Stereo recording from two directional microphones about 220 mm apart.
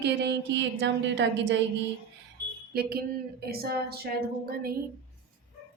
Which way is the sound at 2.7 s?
45° right (ahead or behind).